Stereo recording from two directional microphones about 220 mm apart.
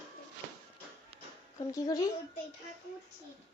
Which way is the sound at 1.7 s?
15° left (ahead or behind).